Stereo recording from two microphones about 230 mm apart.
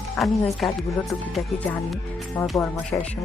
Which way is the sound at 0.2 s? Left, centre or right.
Centre.